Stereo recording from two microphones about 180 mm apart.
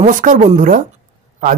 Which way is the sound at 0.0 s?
45° right (ahead or behind).